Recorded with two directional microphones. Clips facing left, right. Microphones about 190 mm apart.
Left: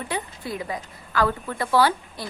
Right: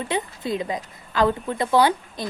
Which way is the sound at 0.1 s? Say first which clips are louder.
Right 6 dB; 20° right (ahead or behind).